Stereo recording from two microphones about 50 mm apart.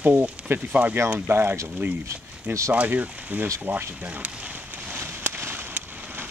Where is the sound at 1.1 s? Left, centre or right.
Right.